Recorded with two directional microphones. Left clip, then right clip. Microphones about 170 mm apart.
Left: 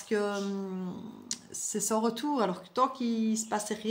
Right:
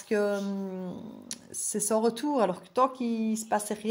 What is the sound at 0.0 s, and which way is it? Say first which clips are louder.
Speech: right 3 dB; 40° right (ahead or behind).